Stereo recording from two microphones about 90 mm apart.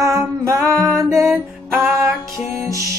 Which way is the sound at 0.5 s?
35° right (ahead or behind).